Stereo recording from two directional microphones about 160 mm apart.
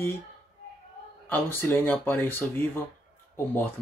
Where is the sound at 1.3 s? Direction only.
10° left (ahead or behind).